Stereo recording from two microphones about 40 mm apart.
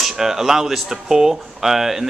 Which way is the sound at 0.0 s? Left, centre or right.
Centre.